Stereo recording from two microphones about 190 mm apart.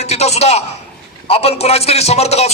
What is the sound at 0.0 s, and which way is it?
Speech, 35° left (ahead or behind).